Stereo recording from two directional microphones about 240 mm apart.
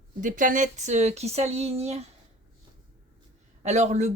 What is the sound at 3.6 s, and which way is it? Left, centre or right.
Speech, right.